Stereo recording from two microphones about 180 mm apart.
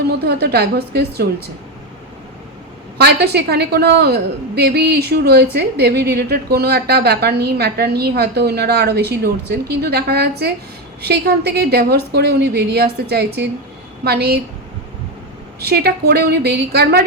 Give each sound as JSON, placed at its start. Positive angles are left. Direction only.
{"t": 0.1, "sound": "a woman's voice", "side_deg": -65}
{"t": 3.0, "sound": "a woman's voice", "side_deg": -65}
{"t": 15.6, "sound": "a woman's voice", "side_deg": -60}